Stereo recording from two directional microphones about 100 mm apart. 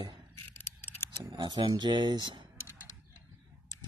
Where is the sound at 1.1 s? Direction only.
45° right (ahead or behind).